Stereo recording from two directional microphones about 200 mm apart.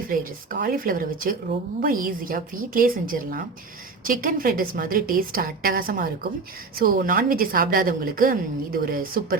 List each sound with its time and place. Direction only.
0.1 s a woman's voice: 45° right (ahead or behind)